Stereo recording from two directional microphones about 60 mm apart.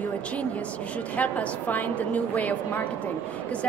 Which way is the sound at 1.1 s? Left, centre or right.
Left.